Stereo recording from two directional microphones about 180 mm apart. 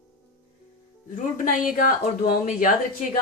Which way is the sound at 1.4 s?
50° left (ahead or behind).